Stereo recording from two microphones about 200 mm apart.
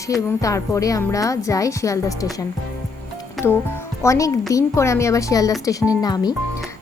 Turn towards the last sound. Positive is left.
turn(degrees=20)  # may be behind; listen again after turning